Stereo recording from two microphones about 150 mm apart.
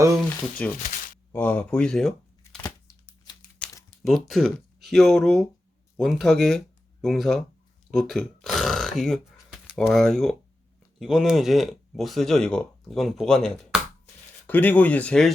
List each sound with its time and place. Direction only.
0.6 s speech: 10° left (ahead or behind)
2.6 s tearing: 25° left (ahead or behind)
3.6 s a sound: 10° left (ahead or behind)
4.0 s speech: centre (ahead or behind)
13.7 s a sound: 5° right (ahead or behind)
14.4 s speech: 10° left (ahead or behind)